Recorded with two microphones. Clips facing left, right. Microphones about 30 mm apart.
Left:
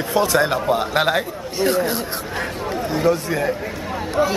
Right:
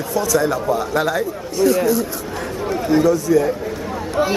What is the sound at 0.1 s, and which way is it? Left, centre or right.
A man's voice, left.